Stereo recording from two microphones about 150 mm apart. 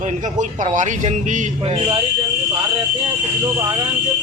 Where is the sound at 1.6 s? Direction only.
40° right (ahead or behind).